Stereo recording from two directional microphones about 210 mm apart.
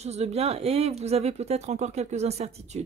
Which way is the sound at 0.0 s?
30° right (ahead or behind).